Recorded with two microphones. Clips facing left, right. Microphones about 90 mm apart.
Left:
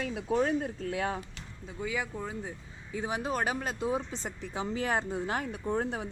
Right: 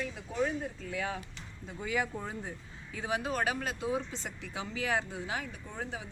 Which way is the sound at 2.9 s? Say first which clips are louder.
Left 1 dB; 20° left (ahead or behind).